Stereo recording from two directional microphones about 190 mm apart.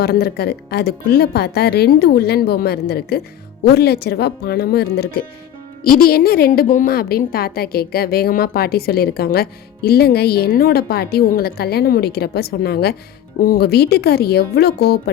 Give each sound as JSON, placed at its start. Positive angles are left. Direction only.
{"t": 0.0, "sound": "a woman's voice", "side_deg": 55}